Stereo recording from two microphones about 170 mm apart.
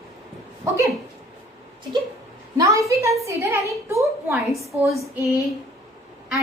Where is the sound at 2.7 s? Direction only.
20° right (ahead or behind).